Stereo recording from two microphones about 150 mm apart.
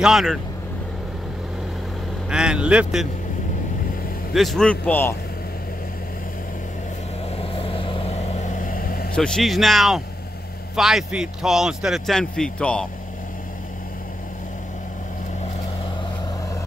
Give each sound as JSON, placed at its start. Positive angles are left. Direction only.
{"t": 0.0, "sound": "speech", "side_deg": 0}
{"t": 2.2, "sound": "speech", "side_deg": -5}
{"t": 4.3, "sound": "speech", "side_deg": 0}
{"t": 7.5, "sound": "vehicle", "side_deg": 35}
{"t": 9.1, "sound": "speech", "side_deg": 5}